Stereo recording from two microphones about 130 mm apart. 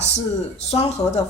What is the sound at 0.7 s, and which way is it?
Speech, 55° left (ahead or behind).